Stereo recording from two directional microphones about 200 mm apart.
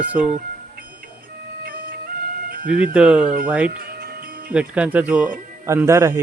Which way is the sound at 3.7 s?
50° right (ahead or behind).